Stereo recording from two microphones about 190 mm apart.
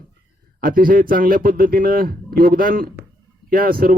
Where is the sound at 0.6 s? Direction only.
50° right (ahead or behind).